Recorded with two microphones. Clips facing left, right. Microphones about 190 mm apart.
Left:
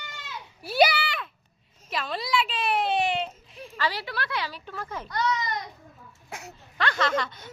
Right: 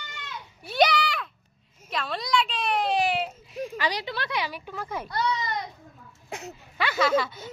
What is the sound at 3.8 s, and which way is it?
Speech, 20° right (ahead or behind).